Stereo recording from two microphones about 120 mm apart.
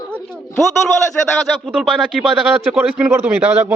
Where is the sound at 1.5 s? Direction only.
5° right (ahead or behind).